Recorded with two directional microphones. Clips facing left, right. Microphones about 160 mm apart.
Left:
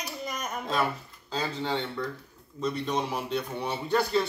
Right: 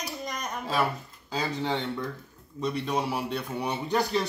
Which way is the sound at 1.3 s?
10° right (ahead or behind).